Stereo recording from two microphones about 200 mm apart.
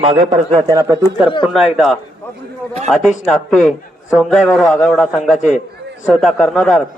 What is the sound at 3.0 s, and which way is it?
Speech, 40° left (ahead or behind).